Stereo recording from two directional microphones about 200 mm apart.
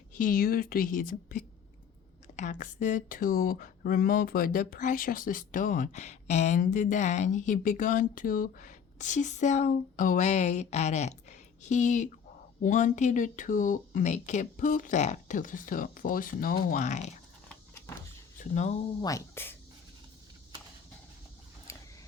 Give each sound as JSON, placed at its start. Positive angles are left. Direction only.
{"t": 0.1, "sound": "a woman's voice", "side_deg": 45}
{"t": 18.3, "sound": "speech", "side_deg": 35}
{"t": 19.0, "sound": "speech", "side_deg": 15}
{"t": 21.7, "sound": "a sound", "side_deg": 15}